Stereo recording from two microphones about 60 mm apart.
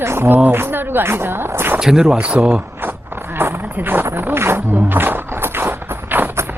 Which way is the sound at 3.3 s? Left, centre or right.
Right.